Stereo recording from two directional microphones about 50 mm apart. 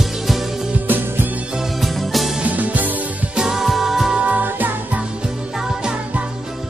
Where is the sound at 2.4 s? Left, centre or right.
Right.